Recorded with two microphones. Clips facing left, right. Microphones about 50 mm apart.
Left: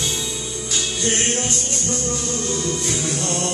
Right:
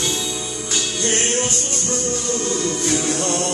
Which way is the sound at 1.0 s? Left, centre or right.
Right.